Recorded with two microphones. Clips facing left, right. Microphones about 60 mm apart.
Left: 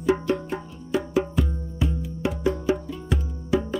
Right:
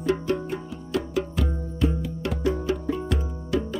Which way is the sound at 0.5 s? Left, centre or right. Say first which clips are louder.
Left 1 dB; centre.